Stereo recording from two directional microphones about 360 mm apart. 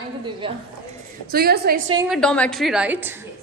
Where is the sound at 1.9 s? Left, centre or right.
Centre.